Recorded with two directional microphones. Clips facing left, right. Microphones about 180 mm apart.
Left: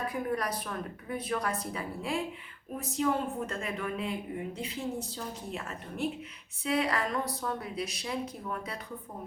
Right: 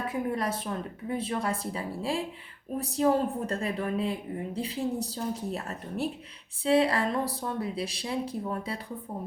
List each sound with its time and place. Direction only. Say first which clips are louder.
0.1 s a woman's voice: right 2 dB; 25° right (ahead or behind)